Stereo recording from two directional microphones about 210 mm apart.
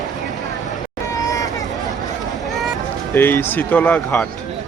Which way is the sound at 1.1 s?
15° left (ahead or behind).